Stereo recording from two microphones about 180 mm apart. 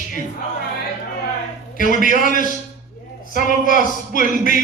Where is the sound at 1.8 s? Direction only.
50° left (ahead or behind).